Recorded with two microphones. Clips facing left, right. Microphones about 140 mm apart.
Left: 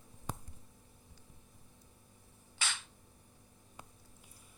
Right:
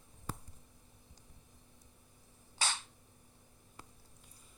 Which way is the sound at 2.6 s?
40° right (ahead or behind).